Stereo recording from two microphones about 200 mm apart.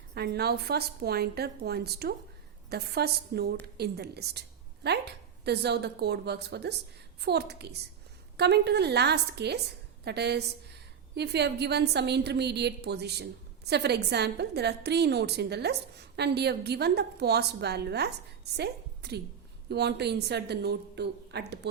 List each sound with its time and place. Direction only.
0.1 s a woman's voice: 55° right (ahead or behind)